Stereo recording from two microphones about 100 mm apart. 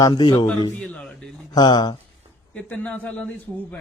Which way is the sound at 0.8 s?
10° left (ahead or behind).